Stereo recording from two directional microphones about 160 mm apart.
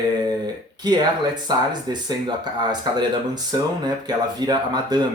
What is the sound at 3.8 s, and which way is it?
Speech, 25° right (ahead or behind).